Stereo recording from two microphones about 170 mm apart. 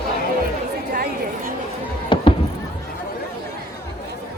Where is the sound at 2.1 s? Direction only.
30° left (ahead or behind).